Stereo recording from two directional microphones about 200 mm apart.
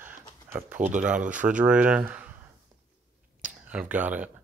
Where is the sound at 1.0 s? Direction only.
5° right (ahead or behind).